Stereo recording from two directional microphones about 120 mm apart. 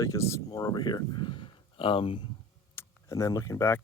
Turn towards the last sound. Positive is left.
turn(degrees=20)  # may be behind; listen again after turning